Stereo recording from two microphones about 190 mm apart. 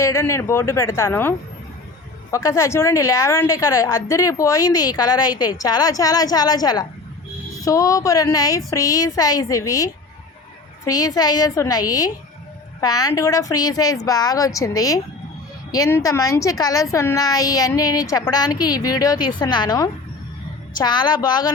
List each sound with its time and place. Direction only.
0.0 s a woman's voice: 15° left (ahead or behind)